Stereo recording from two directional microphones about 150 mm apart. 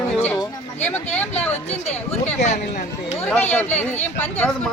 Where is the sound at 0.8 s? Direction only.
10° left (ahead or behind).